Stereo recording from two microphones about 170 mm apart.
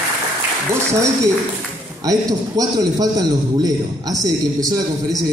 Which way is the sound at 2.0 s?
20° right (ahead or behind).